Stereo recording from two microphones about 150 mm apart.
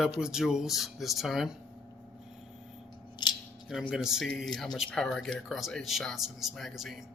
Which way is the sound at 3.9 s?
5° right (ahead or behind).